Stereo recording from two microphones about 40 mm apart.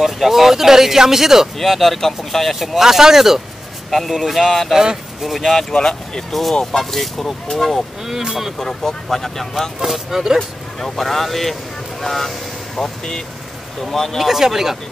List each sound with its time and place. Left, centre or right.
0.0 s speech: centre
1.6 s speech: centre
2.6 s speech: centre
3.9 s speech: centre
8.1 s speech: centre
8.4 s speech: centre
8.6 s speech: centre
9.8 s speech: centre
10.8 s speech: centre
14.2 s speech: centre